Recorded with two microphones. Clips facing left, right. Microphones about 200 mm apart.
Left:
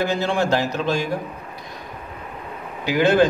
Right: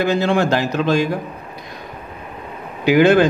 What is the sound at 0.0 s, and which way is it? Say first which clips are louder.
A man's voice: right 4 dB; 70° right (ahead or behind).